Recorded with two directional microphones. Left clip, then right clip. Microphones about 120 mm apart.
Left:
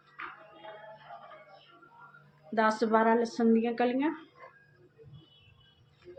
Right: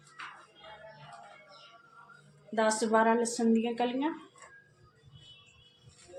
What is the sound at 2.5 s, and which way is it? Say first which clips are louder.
Speech: left 1 dB; 30° left (ahead or behind).